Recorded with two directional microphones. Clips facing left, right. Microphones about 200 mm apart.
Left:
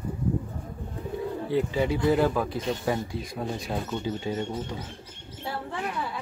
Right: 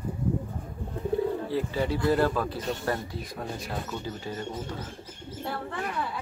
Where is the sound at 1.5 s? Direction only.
15° left (ahead or behind).